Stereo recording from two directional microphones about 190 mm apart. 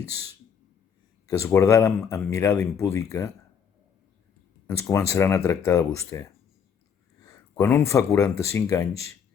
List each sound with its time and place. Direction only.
1.3 s speech: 15° left (ahead or behind)
4.6 s speech: 15° left (ahead or behind)